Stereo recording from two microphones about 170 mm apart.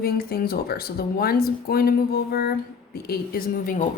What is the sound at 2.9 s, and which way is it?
Speech, 60° left (ahead or behind).